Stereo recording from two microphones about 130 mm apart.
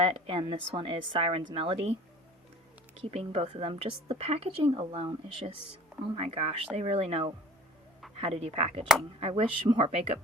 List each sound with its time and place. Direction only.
0.0 s speech: 40° right (ahead or behind)
3.1 s speech: 50° right (ahead or behind)